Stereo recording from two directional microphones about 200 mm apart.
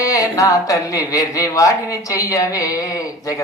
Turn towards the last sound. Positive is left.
turn(degrees=15)  # may be behind; listen again after turning